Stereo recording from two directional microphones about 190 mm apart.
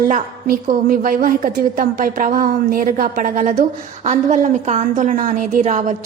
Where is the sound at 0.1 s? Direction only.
45° right (ahead or behind).